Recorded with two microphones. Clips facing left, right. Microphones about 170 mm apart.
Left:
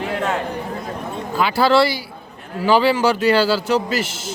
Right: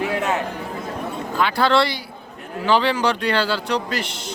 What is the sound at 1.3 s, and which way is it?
A man's voice, 5° left (ahead or behind).